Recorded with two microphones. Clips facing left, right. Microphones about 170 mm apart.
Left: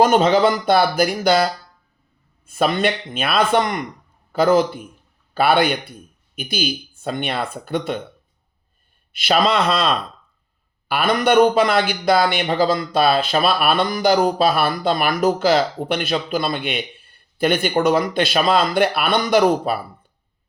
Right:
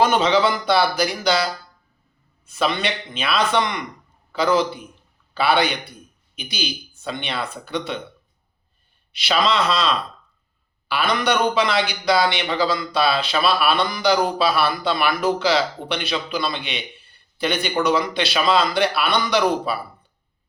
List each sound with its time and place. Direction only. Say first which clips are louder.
0.0 s speech: left 3 dB; 45° left (ahead or behind)
2.5 s speech: left 4 dB; 50° left (ahead or behind)
9.1 s speech: left 3 dB; 50° left (ahead or behind)